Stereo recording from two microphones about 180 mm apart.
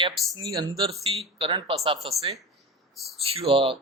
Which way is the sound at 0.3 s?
25° right (ahead or behind).